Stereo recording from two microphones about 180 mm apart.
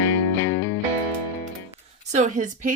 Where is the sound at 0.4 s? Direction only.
15° left (ahead or behind).